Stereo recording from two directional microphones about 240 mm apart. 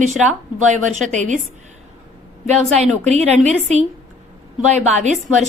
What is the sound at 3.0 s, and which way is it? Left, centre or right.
A woman's voice, right.